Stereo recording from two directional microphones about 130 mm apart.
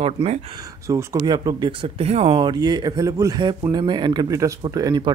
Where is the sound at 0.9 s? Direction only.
25° right (ahead or behind); by 2.4 s 50° right (ahead or behind).